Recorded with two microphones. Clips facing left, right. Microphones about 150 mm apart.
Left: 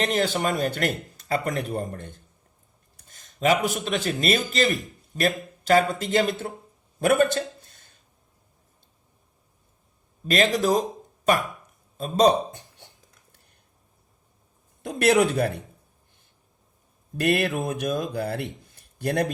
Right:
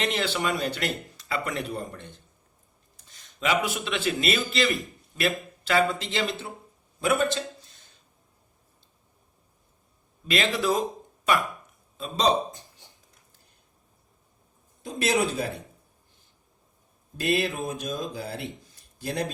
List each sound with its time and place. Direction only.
0.0 s a man's voice: 45° left (ahead or behind)
7.0 s a sound: 55° left (ahead or behind)
10.2 s speech: 45° left (ahead or behind)
14.8 s speech: 65° left (ahead or behind)
17.2 s speech: 60° left (ahead or behind)